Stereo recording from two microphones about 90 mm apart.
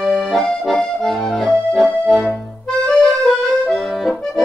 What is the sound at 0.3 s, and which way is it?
Accordion, centre (ahead or behind).